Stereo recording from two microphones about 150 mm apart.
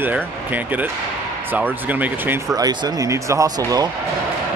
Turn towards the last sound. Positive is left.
turn(degrees=-25)  # may be behind; listen again after turning